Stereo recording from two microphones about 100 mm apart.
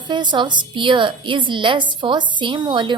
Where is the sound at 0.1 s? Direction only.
50° right (ahead or behind).